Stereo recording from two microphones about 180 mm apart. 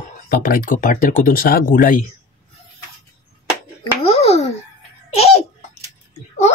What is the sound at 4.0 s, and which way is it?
Babbling, 35° left (ahead or behind).